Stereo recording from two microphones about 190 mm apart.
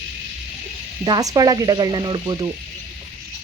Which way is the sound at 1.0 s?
20° right (ahead or behind).